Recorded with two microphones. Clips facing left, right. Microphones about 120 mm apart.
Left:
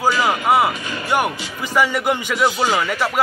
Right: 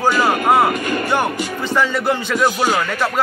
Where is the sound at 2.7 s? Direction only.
10° left (ahead or behind).